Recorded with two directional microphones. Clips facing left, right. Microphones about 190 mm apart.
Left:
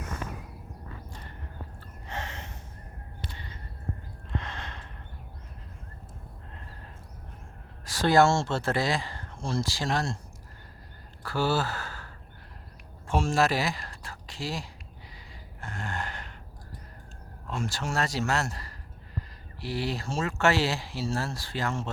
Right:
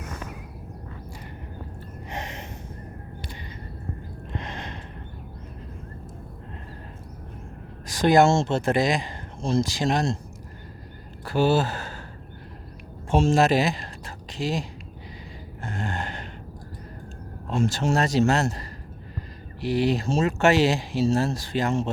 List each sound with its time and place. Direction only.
2.0 s gasp: 15° right (ahead or behind)
4.3 s gasp: 15° right (ahead or behind)
7.9 s speech: 15° right (ahead or behind)
11.2 s gasp: 20° right (ahead or behind)
13.1 s speech: 20° right (ahead or behind)
15.6 s a sound: 20° right (ahead or behind)
17.5 s speech: 25° right (ahead or behind)